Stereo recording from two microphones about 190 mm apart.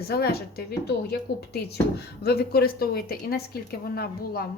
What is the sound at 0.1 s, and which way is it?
Speech, 55° left (ahead or behind).